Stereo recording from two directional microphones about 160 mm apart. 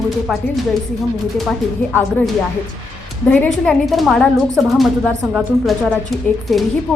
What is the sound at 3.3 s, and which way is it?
A woman's voice, 5° left (ahead or behind).